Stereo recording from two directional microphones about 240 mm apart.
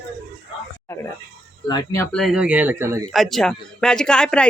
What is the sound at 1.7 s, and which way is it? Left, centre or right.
Speech, centre.